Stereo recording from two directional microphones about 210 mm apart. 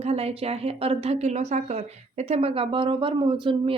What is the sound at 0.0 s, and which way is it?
A woman's voice, 30° right (ahead or behind).